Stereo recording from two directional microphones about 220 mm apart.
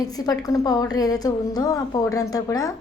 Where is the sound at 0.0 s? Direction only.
15° left (ahead or behind).